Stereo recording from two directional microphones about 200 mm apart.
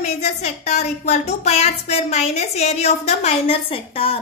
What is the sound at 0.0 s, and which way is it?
A woman's voice, 35° left (ahead or behind).